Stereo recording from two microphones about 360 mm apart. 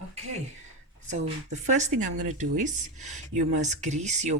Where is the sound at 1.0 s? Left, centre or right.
Centre.